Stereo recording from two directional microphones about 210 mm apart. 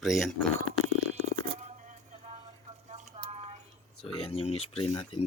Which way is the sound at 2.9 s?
25° right (ahead or behind).